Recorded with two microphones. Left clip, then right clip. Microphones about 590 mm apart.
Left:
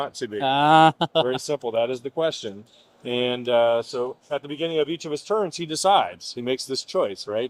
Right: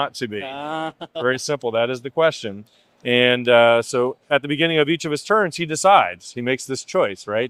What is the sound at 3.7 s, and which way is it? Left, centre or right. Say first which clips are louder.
Speech: right 6 dB; right.